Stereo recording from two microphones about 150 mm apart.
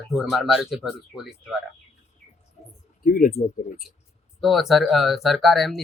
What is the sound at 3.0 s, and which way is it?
Speech, 70° left (ahead or behind).